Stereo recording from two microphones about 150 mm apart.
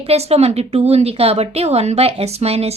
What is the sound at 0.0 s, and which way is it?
A woman's voice, 45° right (ahead or behind).